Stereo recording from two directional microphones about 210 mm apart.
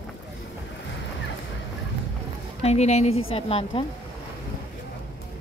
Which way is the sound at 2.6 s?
30° left (ahead or behind).